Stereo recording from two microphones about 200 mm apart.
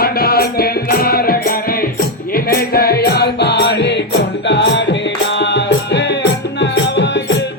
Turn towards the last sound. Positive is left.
turn(degrees=60)  # may be behind; listen again after turning